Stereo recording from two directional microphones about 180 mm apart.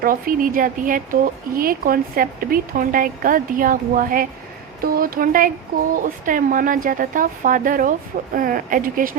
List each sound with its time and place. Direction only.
0.0 s a woman's voice: 50° right (ahead or behind)